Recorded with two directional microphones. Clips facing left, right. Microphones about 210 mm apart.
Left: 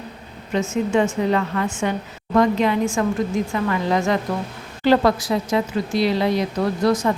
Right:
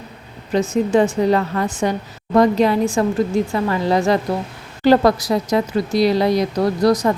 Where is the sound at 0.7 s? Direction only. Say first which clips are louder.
Right 3 dB; 35° right (ahead or behind).